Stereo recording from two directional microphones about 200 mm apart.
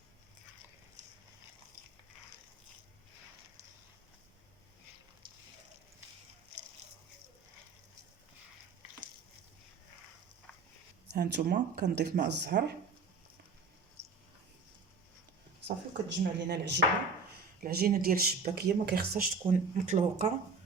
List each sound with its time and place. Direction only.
11.1 s speech: 55° right (ahead or behind)
14.0 s cricket: 30° right (ahead or behind)
15.6 s speech: 60° right (ahead or behind)
17.6 s speech: 50° right (ahead or behind)